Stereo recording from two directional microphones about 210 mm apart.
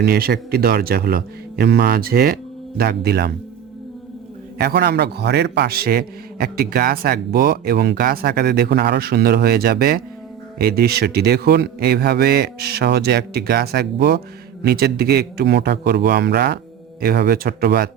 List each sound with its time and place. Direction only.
0.0 s a man's voice: 45° right (ahead or behind)
4.5 s a man's voice: 45° right (ahead or behind)